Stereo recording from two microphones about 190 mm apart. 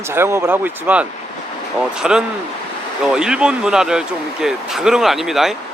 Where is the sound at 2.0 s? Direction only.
5° right (ahead or behind).